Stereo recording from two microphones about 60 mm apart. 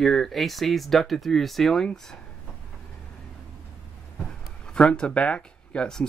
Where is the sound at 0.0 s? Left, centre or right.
Centre.